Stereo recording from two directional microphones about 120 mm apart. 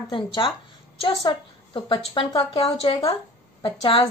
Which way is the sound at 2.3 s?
50° left (ahead or behind).